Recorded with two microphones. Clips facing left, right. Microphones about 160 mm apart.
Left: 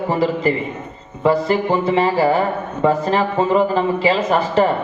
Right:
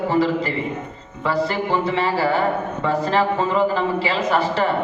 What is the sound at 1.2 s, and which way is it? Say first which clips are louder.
Speech: left 5 dB; 20° left (ahead or behind).